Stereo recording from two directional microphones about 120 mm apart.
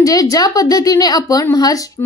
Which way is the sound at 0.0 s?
30° left (ahead or behind).